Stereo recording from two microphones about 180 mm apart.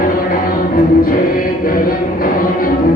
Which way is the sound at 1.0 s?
50° left (ahead or behind).